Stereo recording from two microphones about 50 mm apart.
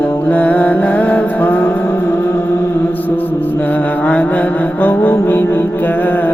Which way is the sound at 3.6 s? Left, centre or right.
Left.